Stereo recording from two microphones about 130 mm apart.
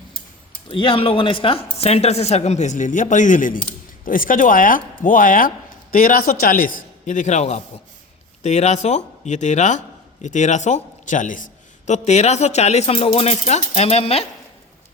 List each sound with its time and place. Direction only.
0.7 s a man's voice: 40° left (ahead or behind); by 11.4 s 80° left
11.9 s speech: 60° left (ahead or behind)